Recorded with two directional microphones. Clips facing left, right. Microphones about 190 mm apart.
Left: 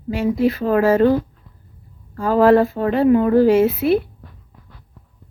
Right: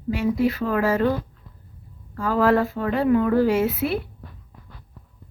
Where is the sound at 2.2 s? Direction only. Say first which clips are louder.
Left 6 dB; 30° left (ahead or behind).